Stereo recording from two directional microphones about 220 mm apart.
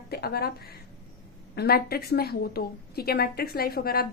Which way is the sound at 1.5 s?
45° left (ahead or behind).